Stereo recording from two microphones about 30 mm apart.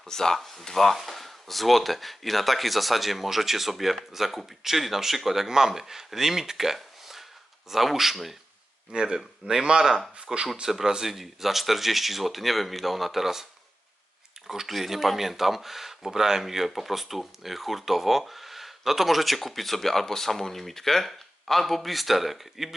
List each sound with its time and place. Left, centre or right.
0.1 s speech: centre
0.3 s speech: centre
6.7 s a sound: centre
7.7 s speech: centre
8.9 s speech: right; by 13.4 s centre
14.4 s speech: centre